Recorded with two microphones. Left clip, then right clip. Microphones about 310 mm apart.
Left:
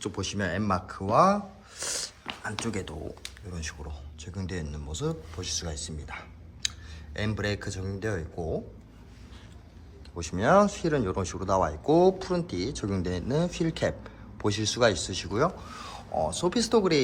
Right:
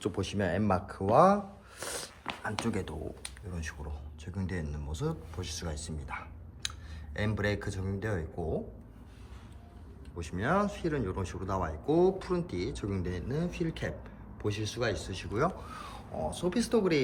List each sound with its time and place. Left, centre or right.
0.0 s speech: centre
10.2 s speech: centre